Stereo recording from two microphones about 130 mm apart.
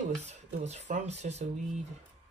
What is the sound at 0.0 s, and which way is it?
Speech, 65° right (ahead or behind).